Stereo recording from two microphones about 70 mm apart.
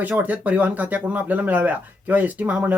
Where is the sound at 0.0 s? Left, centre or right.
Right.